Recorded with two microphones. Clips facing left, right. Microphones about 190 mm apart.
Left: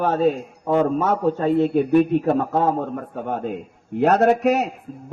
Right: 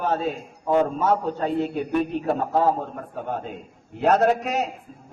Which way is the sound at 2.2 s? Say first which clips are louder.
Left 2 dB; 45° left (ahead or behind).